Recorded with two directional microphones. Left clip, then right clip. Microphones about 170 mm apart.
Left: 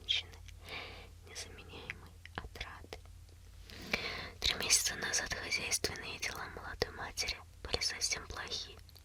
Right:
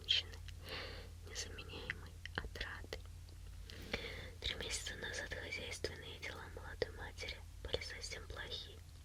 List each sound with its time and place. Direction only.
0.0 s gasp: 5° left (ahead or behind)
1.4 s whispering: centre (ahead or behind)
3.8 s whispering: 30° left (ahead or behind)